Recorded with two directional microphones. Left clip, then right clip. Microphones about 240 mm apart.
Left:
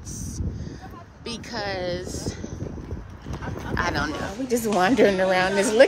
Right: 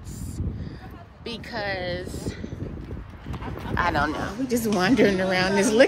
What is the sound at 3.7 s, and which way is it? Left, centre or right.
Speech, centre.